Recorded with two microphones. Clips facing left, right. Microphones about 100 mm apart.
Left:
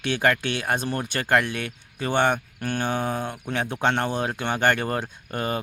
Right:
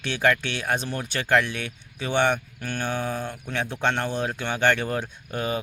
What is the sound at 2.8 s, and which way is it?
Speech, 15° left (ahead or behind).